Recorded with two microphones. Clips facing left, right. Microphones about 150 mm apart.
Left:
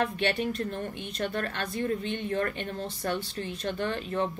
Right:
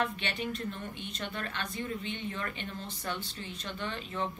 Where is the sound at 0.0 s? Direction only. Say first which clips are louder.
Left 6 dB; 45° left (ahead or behind).